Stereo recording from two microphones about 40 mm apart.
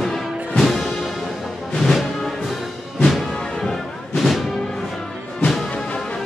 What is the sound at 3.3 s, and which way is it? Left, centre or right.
Music, left.